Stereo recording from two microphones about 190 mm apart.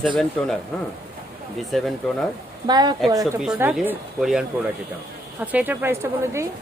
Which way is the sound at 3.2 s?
5° right (ahead or behind).